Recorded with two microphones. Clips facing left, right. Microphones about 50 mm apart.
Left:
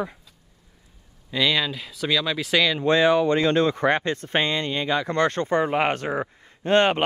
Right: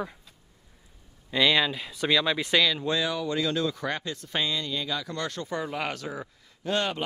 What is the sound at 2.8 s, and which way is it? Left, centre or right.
Speech, left.